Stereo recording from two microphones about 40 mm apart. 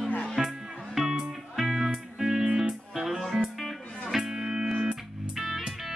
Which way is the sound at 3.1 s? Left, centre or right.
Centre.